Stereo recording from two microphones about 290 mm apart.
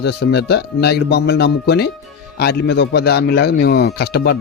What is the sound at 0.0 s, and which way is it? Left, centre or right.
Speech, left.